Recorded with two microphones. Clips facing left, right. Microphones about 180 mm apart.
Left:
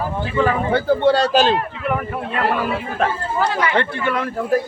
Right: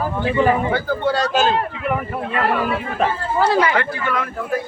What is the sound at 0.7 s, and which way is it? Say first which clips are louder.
Speech: left 4 dB; 30° left (ahead or behind).